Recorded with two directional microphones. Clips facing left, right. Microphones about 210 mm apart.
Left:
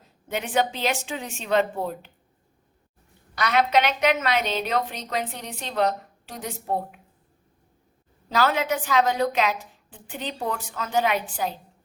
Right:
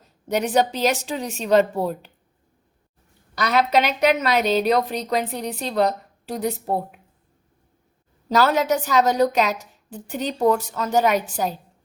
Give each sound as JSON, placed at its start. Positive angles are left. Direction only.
{"t": 0.3, "sound": "a woman's voice", "side_deg": -40}
{"t": 3.3, "sound": "a woman's voice", "side_deg": -40}
{"t": 8.3, "sound": "a woman's voice", "side_deg": -40}